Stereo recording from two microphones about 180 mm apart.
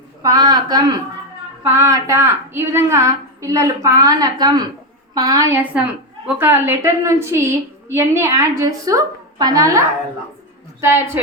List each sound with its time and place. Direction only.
0.2 s a woman's voice: 20° right (ahead or behind)